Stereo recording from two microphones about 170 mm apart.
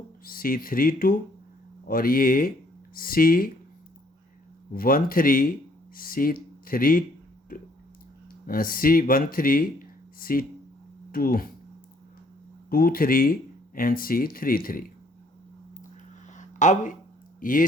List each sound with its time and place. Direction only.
0.3 s speech: 60° left (ahead or behind)
4.7 s speech: 60° left (ahead or behind)
8.4 s speech: 55° left (ahead or behind)
12.7 s speech: 60° left (ahead or behind)
16.3 s a sound: 45° left (ahead or behind)
17.4 s speech: 55° left (ahead or behind)